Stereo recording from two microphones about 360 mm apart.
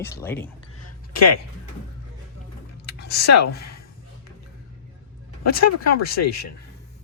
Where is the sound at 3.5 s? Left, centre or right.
Left.